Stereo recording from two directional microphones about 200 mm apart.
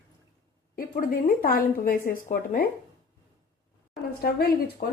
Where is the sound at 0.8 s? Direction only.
45° left (ahead or behind).